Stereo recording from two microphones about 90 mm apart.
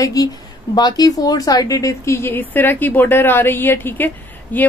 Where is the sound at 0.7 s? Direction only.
50° left (ahead or behind).